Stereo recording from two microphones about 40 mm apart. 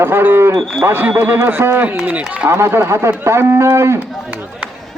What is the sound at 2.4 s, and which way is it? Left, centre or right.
Speech, right.